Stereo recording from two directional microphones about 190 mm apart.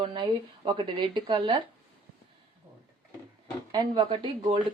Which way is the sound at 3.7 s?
25° right (ahead or behind).